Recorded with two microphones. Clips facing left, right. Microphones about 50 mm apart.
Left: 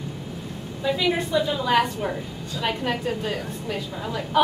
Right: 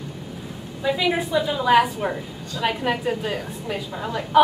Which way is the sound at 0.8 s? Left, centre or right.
Centre.